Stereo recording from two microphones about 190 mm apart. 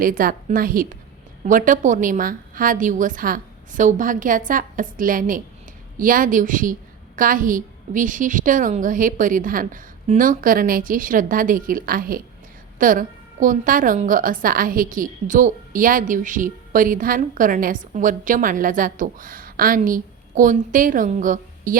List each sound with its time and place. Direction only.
0.0 s a woman's voice: 50° right (ahead or behind)